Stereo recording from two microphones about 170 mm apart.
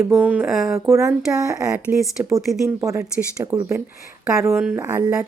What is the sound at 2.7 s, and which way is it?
A woman's voice, 15° right (ahead or behind).